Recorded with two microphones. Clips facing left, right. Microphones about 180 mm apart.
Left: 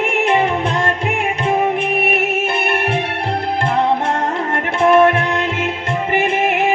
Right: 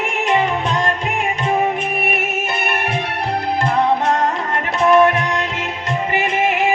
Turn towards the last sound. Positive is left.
turn(degrees=55)  # may be behind; listen again after turning